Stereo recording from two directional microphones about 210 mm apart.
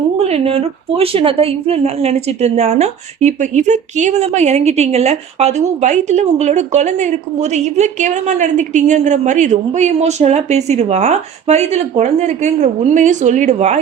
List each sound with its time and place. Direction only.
0.2 s a woman's voice: 30° right (ahead or behind)